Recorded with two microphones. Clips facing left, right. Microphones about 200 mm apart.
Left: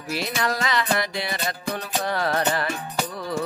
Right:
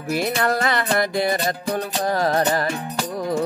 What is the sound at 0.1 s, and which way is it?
Music, 50° right (ahead or behind).